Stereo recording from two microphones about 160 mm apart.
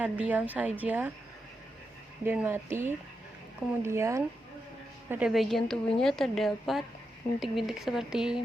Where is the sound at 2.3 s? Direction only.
15° right (ahead or behind).